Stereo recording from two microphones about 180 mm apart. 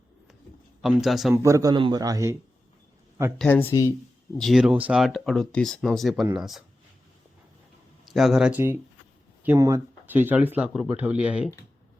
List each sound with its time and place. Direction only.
0.8 s speech: centre (ahead or behind)
1.3 s a man's voice: 15° right (ahead or behind)
3.3 s speech: 10° left (ahead or behind)
4.4 s speech: centre (ahead or behind)
8.1 s speech: centre (ahead or behind)